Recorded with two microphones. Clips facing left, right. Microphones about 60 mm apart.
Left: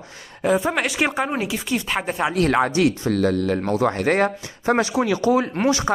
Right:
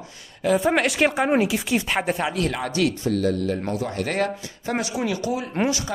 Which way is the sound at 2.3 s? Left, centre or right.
Left.